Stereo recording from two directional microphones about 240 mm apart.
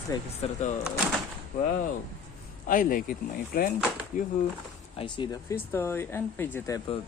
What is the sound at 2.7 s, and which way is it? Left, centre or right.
Speech, left.